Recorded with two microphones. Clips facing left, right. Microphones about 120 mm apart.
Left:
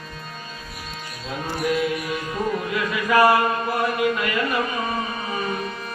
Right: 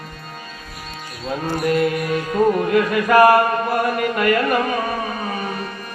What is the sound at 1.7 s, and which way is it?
Mantra, 55° right (ahead or behind).